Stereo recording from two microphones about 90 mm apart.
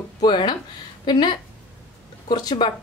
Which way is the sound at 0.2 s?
55° left (ahead or behind).